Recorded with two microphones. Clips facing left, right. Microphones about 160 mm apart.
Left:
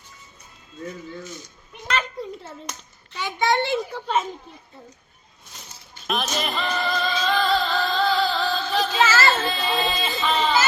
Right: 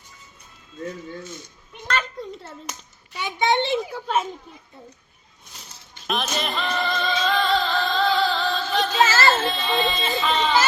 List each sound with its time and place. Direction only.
1.9 s clapping: centre (ahead or behind)
3.1 s a child's voice: 15° right (ahead or behind)
3.9 s speech: 5° right (ahead or behind)
6.1 s music: centre (ahead or behind)
9.0 s a sound: 40° right (ahead or behind)
9.4 s a sound: centre (ahead or behind)